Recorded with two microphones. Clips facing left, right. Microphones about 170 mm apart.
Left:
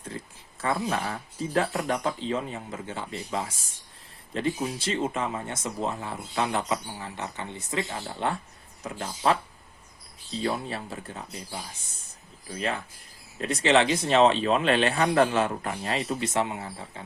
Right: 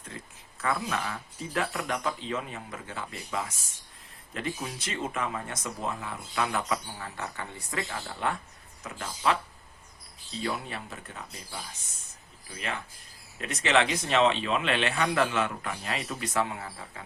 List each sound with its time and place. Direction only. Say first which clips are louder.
0.6 s speech: left 3 dB; 30° left (ahead or behind)
10.4 s speech: left 4 dB; 35° left (ahead or behind)
13.4 s speech: left 4 dB; 30° left (ahead or behind)